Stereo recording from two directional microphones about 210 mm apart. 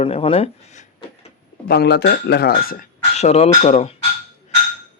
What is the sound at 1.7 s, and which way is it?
Speech, 50° left (ahead or behind).